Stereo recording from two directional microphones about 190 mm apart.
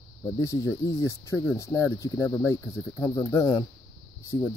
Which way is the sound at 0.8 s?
15° left (ahead or behind).